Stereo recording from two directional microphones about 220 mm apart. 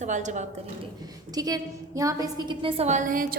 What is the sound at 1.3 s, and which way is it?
A woman's voice, 15° right (ahead or behind).